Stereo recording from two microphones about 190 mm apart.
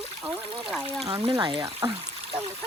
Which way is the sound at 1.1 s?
30° right (ahead or behind).